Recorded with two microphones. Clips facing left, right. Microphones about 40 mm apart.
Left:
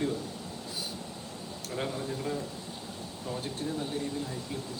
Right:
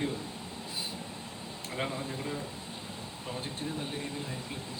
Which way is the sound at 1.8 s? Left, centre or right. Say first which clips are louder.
Left 1 dB; right.